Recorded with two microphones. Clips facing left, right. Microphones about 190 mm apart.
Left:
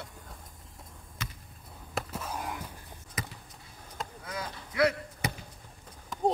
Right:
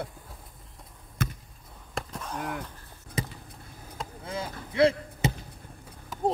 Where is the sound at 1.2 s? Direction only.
55° right (ahead or behind).